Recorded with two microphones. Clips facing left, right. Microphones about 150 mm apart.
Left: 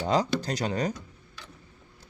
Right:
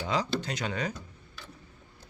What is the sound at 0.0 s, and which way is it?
Speech, 40° left (ahead or behind).